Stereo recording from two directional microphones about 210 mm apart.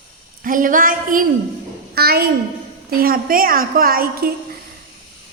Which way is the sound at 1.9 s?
50° right (ahead or behind).